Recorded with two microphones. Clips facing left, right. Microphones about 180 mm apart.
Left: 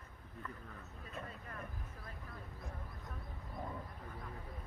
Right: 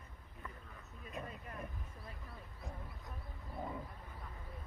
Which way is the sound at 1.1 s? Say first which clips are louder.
Right 2 dB; 15° right (ahead or behind).